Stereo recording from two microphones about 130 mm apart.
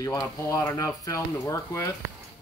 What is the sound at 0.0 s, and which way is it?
Speech, 25° left (ahead or behind).